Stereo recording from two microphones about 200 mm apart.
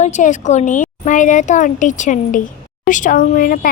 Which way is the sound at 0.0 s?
35° left (ahead or behind).